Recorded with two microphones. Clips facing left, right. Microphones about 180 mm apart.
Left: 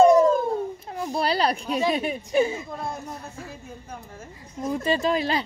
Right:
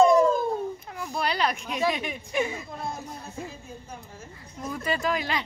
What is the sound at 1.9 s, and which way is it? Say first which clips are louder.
Speech: left 4 dB; 35° left (ahead or behind).